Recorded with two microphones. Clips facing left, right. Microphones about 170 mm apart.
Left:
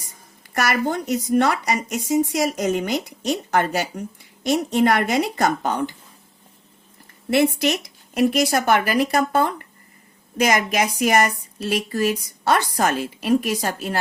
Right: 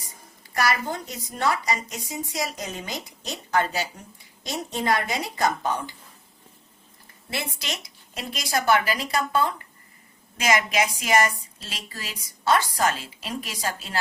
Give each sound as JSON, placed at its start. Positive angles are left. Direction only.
{"t": 0.5, "sound": "a woman's voice", "side_deg": 60}
{"t": 8.1, "sound": "a woman's voice", "side_deg": 55}